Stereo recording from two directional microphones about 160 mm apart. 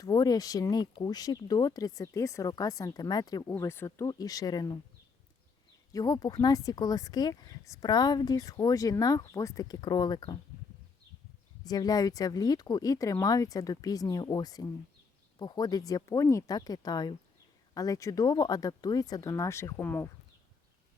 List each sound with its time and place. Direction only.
0.0 s speech: 25° left (ahead or behind)
5.9 s speech: 25° left (ahead or behind)
11.6 s speech: 25° left (ahead or behind)